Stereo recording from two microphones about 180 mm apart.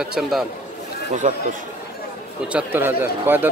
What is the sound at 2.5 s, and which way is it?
Speech, 10° right (ahead or behind).